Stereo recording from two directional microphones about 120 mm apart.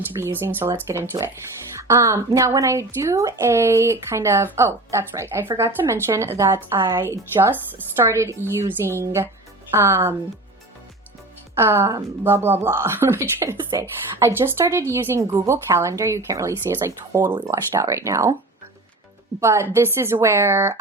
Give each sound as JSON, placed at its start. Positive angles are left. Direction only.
{"t": 0.2, "sound": "a woman's voice", "side_deg": -20}
{"t": 11.5, "sound": "a woman's voice", "side_deg": -20}
{"t": 19.4, "sound": "a woman's voice", "side_deg": -25}